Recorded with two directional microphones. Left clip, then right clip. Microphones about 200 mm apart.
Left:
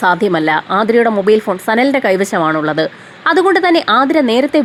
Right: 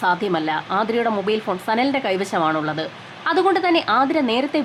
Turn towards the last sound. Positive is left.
turn(degrees=25)  # may be behind; listen again after turning